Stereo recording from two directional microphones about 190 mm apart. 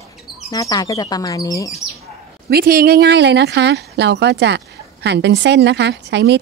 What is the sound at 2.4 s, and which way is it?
Speech, 50° right (ahead or behind).